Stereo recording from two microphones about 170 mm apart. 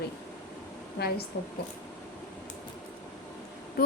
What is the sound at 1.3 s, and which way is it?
Speech, 90° left.